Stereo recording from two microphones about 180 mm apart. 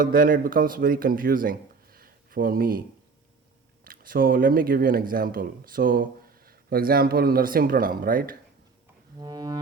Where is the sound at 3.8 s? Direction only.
55° right (ahead or behind).